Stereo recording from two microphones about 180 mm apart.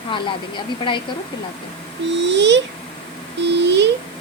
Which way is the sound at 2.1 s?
80° right.